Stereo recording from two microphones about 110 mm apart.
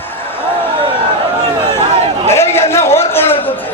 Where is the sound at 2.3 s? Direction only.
25° left (ahead or behind).